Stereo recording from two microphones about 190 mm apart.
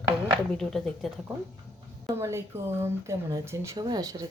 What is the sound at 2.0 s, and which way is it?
A woman's voice, 15° right (ahead or behind).